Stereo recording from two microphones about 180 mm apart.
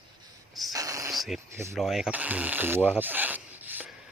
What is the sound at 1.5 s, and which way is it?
Speech, 15° right (ahead or behind).